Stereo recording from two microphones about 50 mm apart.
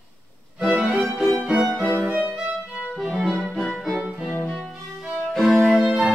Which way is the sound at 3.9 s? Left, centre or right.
Right.